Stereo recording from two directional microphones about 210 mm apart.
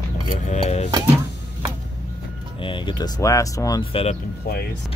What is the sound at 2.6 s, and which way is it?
Speech, 25° left (ahead or behind).